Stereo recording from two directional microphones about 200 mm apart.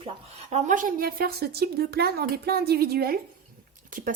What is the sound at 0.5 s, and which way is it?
A woman's voice, 40° right (ahead or behind).